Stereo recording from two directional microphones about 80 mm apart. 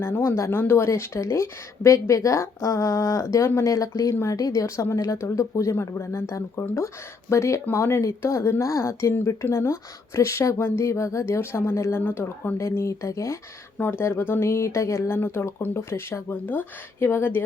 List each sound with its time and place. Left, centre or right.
0.0 s speech: left
4.1 s speech: left
4.4 s speech: left
13.7 s speech: left